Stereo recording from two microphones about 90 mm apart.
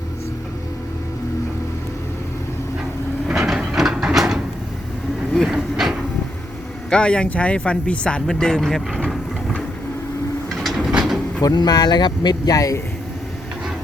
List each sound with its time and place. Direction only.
3.2 s a sound: 5° right (ahead or behind)
5.5 s train: 5° right (ahead or behind)
6.9 s speech: 10° left (ahead or behind)
9.0 s vehicle: 10° left (ahead or behind)
10.5 s sliding door: centre (ahead or behind)
10.9 s a sound: 5° right (ahead or behind)
11.4 s speech: 50° left (ahead or behind)